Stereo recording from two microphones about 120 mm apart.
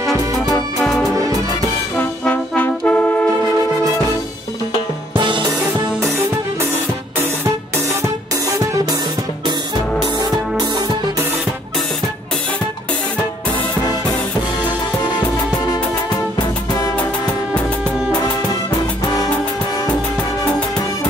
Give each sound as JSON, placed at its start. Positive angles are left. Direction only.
{"t": 0.1, "sound": "music", "side_deg": 0}
{"t": 2.0, "sound": "brass instrument", "side_deg": 15}
{"t": 5.1, "sound": "music", "side_deg": -45}
{"t": 15.1, "sound": "music", "side_deg": 35}